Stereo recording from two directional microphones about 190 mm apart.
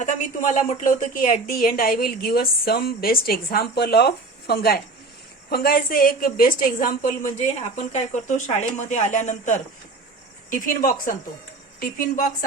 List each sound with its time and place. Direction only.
0.0 s a woman's voice: 40° left (ahead or behind)